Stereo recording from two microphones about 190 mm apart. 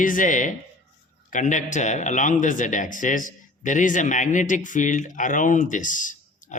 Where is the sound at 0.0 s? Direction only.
45° left (ahead or behind).